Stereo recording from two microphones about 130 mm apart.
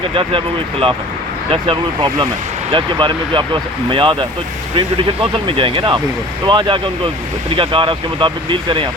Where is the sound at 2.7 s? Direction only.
40° right (ahead or behind).